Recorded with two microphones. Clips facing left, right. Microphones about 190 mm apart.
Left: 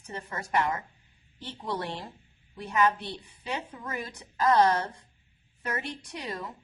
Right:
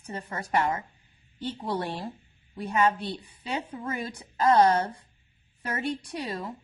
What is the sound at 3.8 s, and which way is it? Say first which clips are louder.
A woman's voice: right 4 dB; 25° right (ahead or behind).